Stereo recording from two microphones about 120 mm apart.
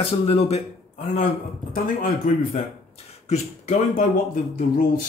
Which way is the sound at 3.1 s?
70° left (ahead or behind).